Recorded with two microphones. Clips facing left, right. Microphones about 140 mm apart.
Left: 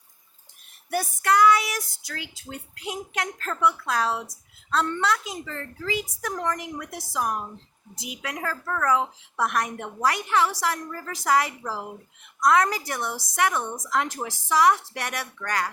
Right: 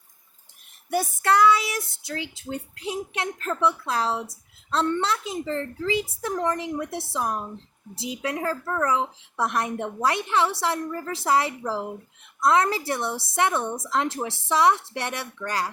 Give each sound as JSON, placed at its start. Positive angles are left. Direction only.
{"t": 0.9, "sound": "speech", "side_deg": -25}